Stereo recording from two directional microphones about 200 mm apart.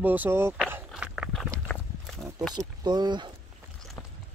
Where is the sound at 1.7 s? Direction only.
5° left (ahead or behind).